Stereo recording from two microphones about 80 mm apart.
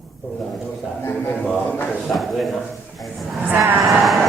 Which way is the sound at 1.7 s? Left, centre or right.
Left.